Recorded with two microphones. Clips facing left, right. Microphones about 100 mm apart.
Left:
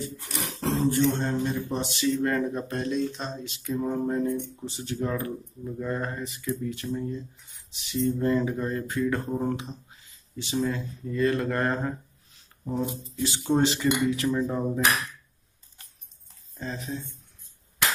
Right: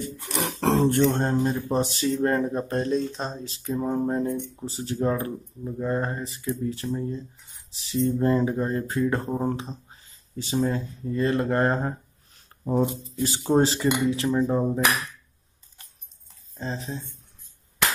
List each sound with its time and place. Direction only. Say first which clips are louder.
0.0 s speech: right 5 dB; 60° right (ahead or behind); by 11.9 s 30° right (ahead or behind)
12.6 s speech: right 6 dB; 45° right (ahead or behind)
16.5 s speech: right 2 dB; 30° right (ahead or behind)